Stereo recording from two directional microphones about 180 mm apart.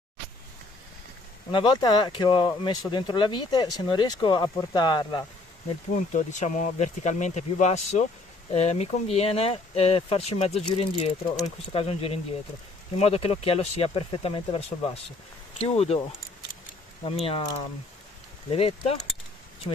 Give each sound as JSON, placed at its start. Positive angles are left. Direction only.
{"t": 1.5, "sound": "speech", "side_deg": 25}
{"t": 5.9, "sound": "speech", "side_deg": 45}
{"t": 17.0, "sound": "speech", "side_deg": 30}
{"t": 18.5, "sound": "speech", "side_deg": 35}